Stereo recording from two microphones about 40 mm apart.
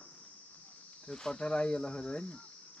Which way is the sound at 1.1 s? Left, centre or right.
Left.